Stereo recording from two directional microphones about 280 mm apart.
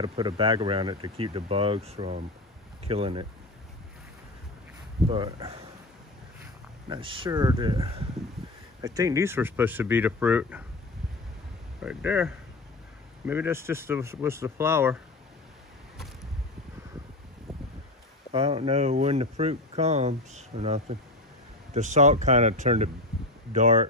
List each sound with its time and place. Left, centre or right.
0.0 s speech: centre
5.0 s speech: centre
11.8 s speech: centre
18.3 s speech: right